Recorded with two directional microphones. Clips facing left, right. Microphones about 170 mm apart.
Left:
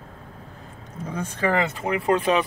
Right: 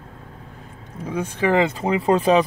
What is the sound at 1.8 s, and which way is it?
Speech, 35° right (ahead or behind).